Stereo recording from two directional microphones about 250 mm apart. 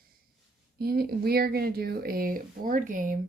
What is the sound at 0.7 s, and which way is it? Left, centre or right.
Speech, right.